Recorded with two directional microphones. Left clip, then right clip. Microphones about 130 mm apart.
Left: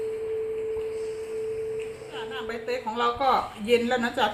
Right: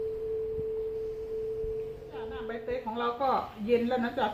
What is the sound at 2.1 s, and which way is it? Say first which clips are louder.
A woman's voice: left 4 dB; 20° left (ahead or behind).